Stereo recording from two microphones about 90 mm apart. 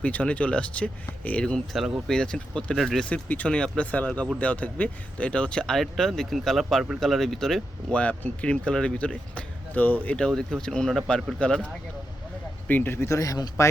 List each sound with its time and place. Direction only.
0.0 s speech: 15° left (ahead or behind)
1.7 s speech: centre (ahead or behind)
2.1 s speech: 10° left (ahead or behind)
3.1 s speech: 15° left (ahead or behind)
12.6 s speech: 20° left (ahead or behind); by 13.7 s 40° left (ahead or behind)